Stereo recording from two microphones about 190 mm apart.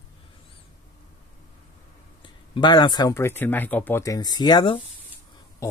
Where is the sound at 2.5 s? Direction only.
25° left (ahead or behind).